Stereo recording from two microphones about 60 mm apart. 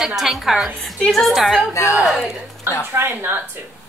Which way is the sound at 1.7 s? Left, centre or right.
Left.